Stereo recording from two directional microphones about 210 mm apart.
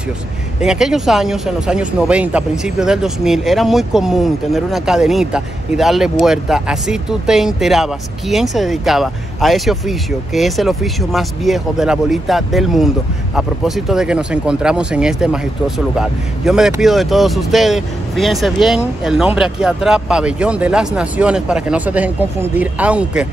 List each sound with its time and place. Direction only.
0.6 s speech: centre (ahead or behind)